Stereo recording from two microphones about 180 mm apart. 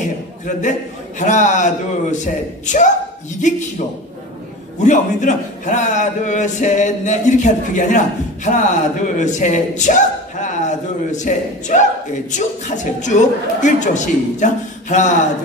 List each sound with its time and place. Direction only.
1.2 s a man's voice: 40° left (ahead or behind)
4.7 s a man's voice: 45° left (ahead or behind)